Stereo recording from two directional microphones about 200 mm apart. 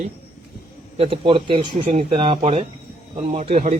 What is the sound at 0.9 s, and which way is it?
Speech, 30° right (ahead or behind).